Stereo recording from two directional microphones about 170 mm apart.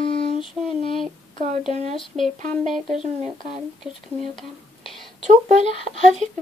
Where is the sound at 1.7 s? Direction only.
40° right (ahead or behind).